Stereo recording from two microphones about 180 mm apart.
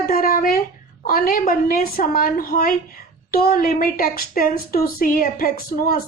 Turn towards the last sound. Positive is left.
turn(degrees=55)  # may be behind; listen again after turning